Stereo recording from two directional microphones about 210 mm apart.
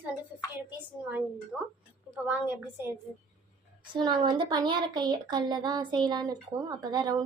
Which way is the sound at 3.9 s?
20° right (ahead or behind).